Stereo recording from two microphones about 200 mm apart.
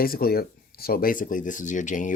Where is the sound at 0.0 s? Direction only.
50° left (ahead or behind).